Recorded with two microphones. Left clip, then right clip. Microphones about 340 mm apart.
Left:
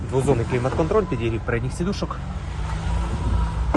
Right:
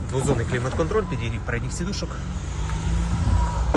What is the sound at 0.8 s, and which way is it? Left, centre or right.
Speech, centre.